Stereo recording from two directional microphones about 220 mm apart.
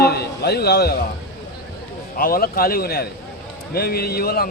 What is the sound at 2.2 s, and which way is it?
Speech, 40° left (ahead or behind).